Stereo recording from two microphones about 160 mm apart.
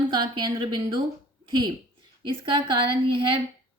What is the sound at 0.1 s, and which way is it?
A woman's voice, 25° right (ahead or behind).